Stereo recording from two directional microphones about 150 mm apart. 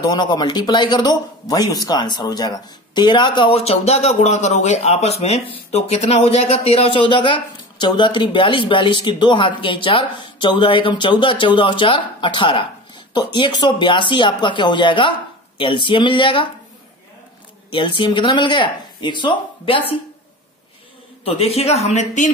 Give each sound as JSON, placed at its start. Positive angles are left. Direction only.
{"t": 0.0, "sound": "speech", "side_deg": 30}
{"t": 17.6, "sound": "speech", "side_deg": 35}
{"t": 21.2, "sound": "speech", "side_deg": 40}